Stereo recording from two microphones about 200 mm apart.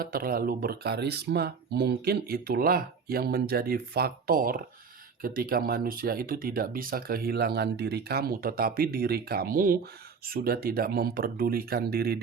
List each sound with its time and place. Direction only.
0.0 s speech: 45° right (ahead or behind)